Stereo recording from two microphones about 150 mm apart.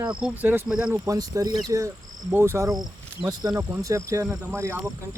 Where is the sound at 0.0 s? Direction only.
5° right (ahead or behind).